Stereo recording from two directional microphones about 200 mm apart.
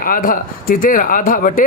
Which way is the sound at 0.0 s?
45° left (ahead or behind).